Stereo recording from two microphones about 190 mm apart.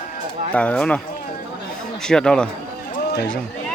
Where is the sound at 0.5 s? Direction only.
5° left (ahead or behind).